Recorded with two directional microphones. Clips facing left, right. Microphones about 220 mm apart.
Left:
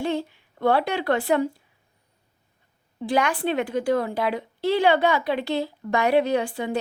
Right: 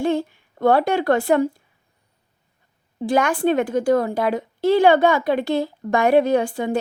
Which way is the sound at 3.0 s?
45° right (ahead or behind).